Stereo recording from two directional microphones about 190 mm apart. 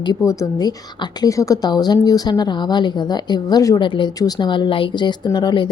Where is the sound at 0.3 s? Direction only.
15° left (ahead or behind).